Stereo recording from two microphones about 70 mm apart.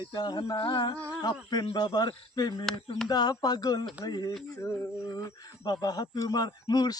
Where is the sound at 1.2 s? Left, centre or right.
Left.